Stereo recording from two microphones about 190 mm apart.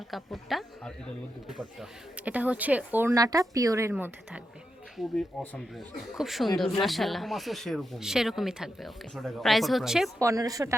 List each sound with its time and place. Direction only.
0.1 s speech: centre (ahead or behind)
4.9 s speech: centre (ahead or behind)
10.2 s speech: 15° right (ahead or behind)